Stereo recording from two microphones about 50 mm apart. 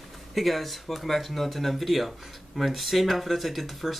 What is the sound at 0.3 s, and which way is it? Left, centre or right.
Speech, centre.